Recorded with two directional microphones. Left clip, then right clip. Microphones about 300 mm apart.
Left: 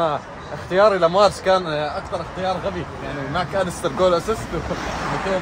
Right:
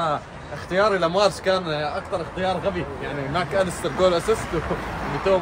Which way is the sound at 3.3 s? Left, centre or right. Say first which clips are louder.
Even; centre.